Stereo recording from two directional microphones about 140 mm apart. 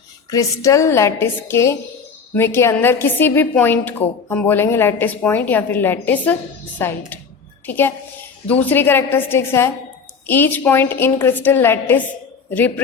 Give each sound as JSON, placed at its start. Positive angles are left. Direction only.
{"t": 0.3, "sound": "a woman's voice", "side_deg": 25}